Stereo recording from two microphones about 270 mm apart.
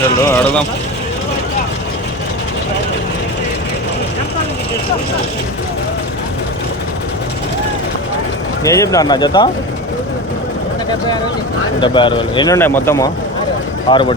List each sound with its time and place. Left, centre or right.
0.3 s speech: centre
8.6 s speech: centre
11.8 s speech: centre